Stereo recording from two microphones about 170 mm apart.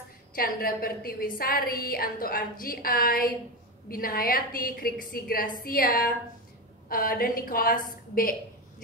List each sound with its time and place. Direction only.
0.3 s a woman's voice: 60° left (ahead or behind)